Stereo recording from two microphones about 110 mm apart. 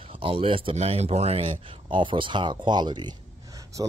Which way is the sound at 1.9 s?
50° right (ahead or behind).